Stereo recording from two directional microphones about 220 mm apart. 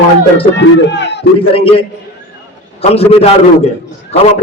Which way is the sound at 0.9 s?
50° left (ahead or behind).